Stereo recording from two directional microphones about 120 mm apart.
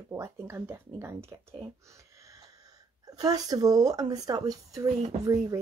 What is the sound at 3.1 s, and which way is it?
Speech, 30° right (ahead or behind).